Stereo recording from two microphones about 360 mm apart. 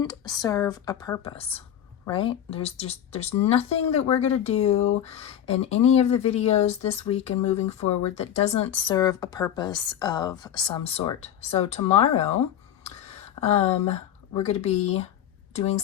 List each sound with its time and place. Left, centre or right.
0.0 s speech: centre